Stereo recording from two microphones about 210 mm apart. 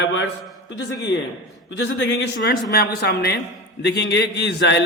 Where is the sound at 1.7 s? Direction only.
60° left (ahead or behind).